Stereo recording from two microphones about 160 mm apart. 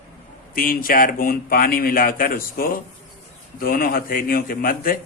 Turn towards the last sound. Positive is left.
turn(degrees=60)  # may be behind; listen again after turning